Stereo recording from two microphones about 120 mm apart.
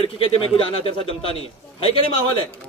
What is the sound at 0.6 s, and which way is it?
A man's voice, 50° left (ahead or behind).